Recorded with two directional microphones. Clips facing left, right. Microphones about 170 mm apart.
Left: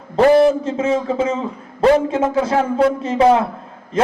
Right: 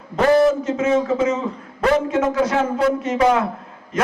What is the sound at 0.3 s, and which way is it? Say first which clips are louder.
A man's voice: left 2 dB; 30° left (ahead or behind).